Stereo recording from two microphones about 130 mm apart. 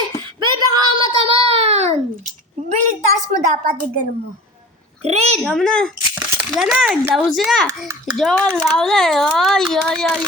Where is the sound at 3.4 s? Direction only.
80° right.